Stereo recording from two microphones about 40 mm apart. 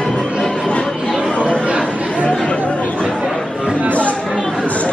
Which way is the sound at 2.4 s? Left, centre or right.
Left.